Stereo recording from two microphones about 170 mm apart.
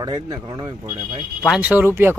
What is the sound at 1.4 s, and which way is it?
Speech, 5° right (ahead or behind).